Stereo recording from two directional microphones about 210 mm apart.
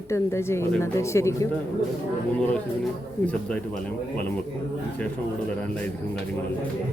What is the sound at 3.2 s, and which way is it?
Speech, 5° left (ahead or behind).